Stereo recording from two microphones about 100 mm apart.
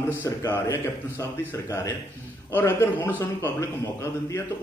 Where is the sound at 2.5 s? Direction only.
20° left (ahead or behind).